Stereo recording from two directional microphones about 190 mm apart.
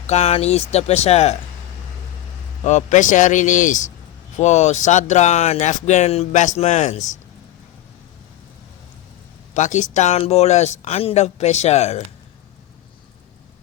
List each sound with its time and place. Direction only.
0.1 s speech: 35° left (ahead or behind)
2.6 s speech: 40° left (ahead or behind)
9.6 s speech: 40° left (ahead or behind)